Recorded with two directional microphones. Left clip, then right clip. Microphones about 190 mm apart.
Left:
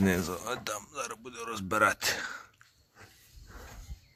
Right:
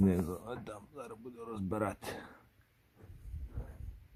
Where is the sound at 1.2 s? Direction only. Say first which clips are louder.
Left 6 dB; 25° left (ahead or behind).